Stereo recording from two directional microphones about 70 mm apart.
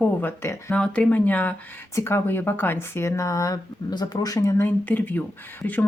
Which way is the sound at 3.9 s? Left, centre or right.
Left.